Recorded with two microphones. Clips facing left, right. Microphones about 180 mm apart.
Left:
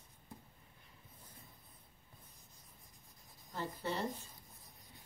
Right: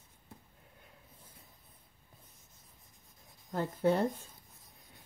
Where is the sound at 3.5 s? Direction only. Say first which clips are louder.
Right 11 dB; 55° right (ahead or behind).